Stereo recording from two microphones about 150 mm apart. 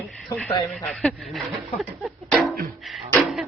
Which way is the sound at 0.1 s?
5° left (ahead or behind).